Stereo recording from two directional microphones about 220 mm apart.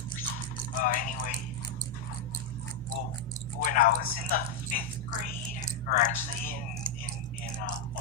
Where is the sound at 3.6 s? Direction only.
40° left (ahead or behind).